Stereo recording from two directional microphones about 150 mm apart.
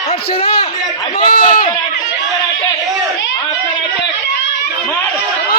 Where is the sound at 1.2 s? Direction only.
35° left (ahead or behind).